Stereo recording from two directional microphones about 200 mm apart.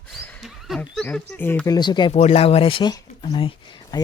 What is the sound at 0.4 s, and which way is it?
Speech, centre (ahead or behind).